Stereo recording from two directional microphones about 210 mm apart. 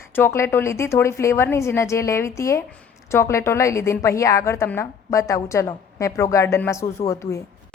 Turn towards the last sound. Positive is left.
turn(degrees=25)  # may be behind; listen again after turning